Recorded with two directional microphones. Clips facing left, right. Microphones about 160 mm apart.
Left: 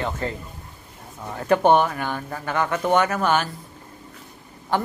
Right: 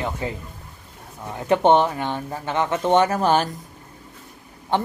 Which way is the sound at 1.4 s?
20° right (ahead or behind).